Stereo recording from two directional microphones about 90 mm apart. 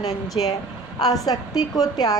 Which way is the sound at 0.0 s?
45° left (ahead or behind).